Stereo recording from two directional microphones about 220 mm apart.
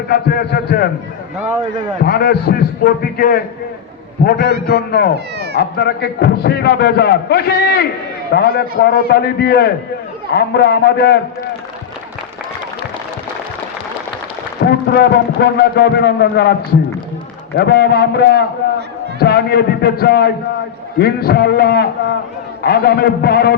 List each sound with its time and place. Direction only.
0.1 s a man's voice: 40° left (ahead or behind)
2.0 s a man's voice: 45° left (ahead or behind)
14.6 s a man's voice: 45° left (ahead or behind)
17.6 s a man's voice: 50° left (ahead or behind)